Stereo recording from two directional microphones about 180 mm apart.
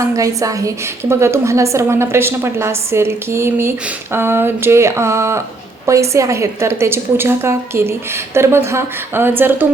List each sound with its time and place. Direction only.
0.0 s a woman's voice: 15° right (ahead or behind)